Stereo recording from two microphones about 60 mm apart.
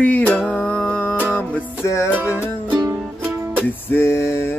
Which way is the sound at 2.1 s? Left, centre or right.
Right.